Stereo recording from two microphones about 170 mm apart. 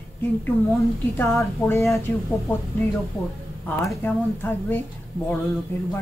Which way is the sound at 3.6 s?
10° left (ahead or behind).